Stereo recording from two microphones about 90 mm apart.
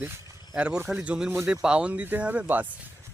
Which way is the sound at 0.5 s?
15° right (ahead or behind).